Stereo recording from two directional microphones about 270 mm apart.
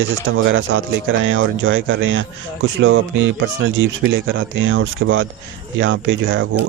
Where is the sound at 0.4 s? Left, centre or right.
Right.